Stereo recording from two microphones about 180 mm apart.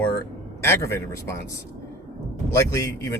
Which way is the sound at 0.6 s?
15° left (ahead or behind).